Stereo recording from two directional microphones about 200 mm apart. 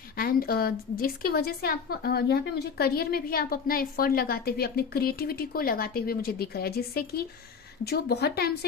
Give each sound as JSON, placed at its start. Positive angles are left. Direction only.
{"t": 0.2, "sound": "a woman's voice", "side_deg": 50}